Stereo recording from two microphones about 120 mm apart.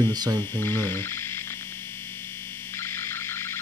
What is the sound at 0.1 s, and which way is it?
Speech, 35° right (ahead or behind).